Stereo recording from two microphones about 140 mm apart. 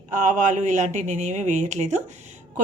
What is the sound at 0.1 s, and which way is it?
A woman's voice, 65° right (ahead or behind).